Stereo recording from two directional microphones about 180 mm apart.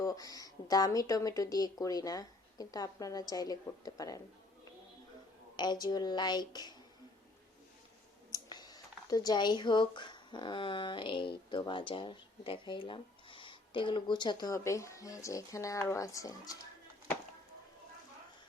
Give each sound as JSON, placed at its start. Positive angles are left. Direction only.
{"t": 0.0, "sound": "speech", "side_deg": 20}
{"t": 5.5, "sound": "speech", "side_deg": 25}
{"t": 8.3, "sound": "speech", "side_deg": 20}